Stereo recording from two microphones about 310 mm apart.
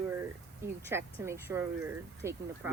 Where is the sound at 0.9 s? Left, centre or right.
Centre.